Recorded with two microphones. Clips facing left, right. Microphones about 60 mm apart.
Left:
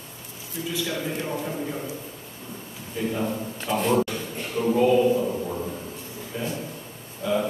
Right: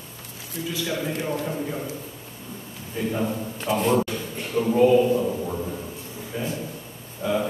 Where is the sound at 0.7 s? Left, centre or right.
Centre.